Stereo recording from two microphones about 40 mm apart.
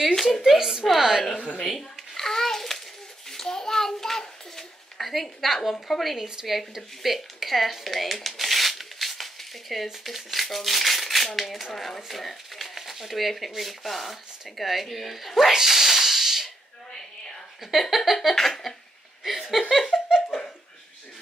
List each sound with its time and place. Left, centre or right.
0.1 s speech: centre
0.6 s a woman's voice: centre
1.6 s a child's voice: centre
6.1 s a woman's voice: centre
6.7 s speech: centre
15.5 s a sound: centre
17.6 s speech: centre
18.3 s a sound: centre
19.2 s a woman's voice: centre
19.7 s speech: centre
20.1 s laughter: centre